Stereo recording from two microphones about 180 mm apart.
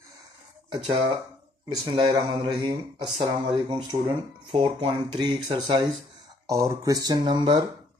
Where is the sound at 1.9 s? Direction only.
25° right (ahead or behind).